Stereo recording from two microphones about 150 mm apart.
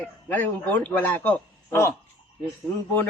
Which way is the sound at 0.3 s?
10° left (ahead or behind).